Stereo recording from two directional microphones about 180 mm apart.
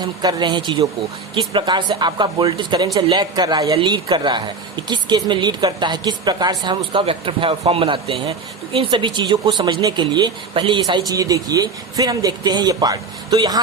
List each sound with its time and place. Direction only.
0.0 s a woman's voice: 25° right (ahead or behind)